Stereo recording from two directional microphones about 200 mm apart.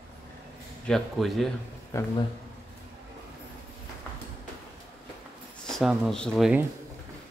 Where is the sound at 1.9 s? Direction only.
15° left (ahead or behind).